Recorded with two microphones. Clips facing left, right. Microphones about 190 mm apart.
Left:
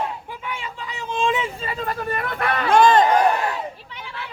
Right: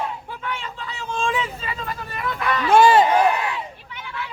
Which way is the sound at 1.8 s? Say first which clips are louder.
Left 4 dB; 55° left (ahead or behind).